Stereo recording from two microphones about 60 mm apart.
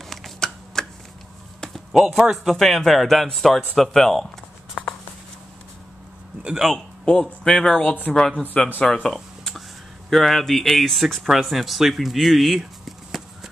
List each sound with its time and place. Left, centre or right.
0.0 s a sound: centre
2.1 s speech: centre
4.8 s writing: centre
6.6 s speech: centre
7.8 s speech: left
8.1 s speech: centre
9.0 s a sound: centre
10.0 s speech: centre